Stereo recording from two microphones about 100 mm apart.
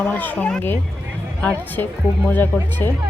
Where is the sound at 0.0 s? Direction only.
15° left (ahead or behind).